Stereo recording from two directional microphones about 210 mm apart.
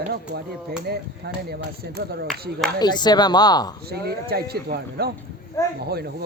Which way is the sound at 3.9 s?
50° right (ahead or behind).